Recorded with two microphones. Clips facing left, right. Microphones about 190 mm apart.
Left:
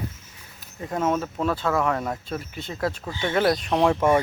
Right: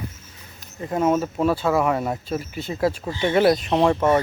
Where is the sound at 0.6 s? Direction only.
Centre (ahead or behind).